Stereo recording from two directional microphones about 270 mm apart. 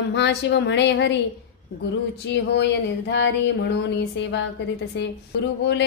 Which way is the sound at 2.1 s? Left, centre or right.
Left.